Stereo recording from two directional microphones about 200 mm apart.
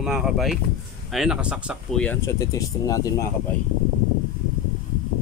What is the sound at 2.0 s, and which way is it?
Speech, 10° left (ahead or behind).